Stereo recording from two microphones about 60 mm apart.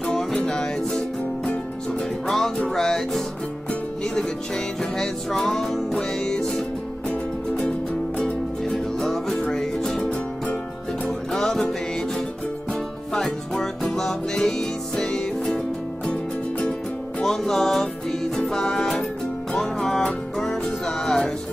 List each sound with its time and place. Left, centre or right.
0.0 s music: centre
13.1 s music: centre
17.2 s music: centre